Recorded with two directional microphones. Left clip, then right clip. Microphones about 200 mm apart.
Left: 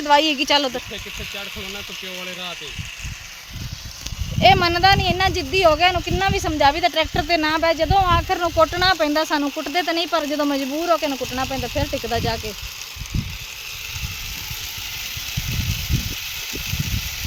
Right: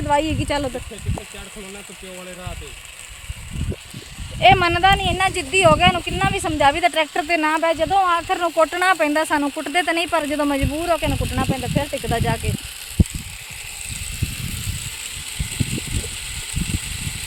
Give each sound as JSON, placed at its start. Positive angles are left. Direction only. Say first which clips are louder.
{"t": 0.1, "sound": "speech", "louder": "left 4 dB", "side_deg": 5}
{"t": 4.4, "sound": "speech", "louder": "right 1 dB", "side_deg": -10}
{"t": 15.4, "sound": "a sound", "louder": "left 1 dB", "side_deg": 45}